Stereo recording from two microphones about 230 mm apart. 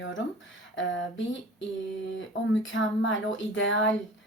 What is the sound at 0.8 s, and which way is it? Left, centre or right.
Speech, left.